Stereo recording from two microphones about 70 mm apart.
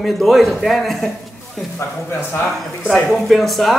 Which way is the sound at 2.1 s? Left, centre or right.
Left.